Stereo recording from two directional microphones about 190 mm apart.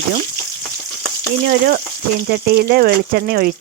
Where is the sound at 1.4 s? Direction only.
50° right (ahead or behind).